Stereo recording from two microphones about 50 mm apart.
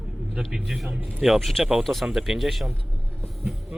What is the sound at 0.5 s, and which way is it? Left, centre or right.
Speech, centre.